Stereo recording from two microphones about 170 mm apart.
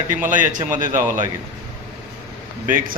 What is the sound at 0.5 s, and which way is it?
Speech, 50° right (ahead or behind).